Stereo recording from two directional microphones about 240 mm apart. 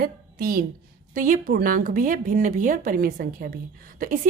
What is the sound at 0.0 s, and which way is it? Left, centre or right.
A woman's voice, right.